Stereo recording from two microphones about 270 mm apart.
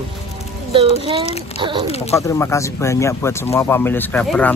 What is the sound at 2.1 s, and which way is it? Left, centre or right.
Speech, centre.